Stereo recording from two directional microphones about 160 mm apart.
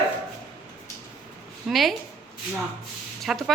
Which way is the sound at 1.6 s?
Centre (ahead or behind).